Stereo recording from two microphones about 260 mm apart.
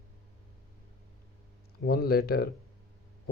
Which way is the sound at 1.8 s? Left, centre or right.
Left.